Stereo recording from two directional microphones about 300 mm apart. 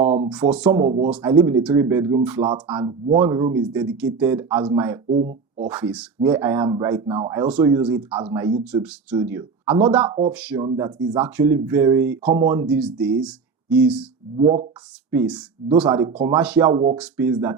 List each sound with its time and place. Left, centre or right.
0.0 s speech: centre
5.0 s speech: right
5.6 s speech: centre
14.3 s speech: centre
15.1 s speech: centre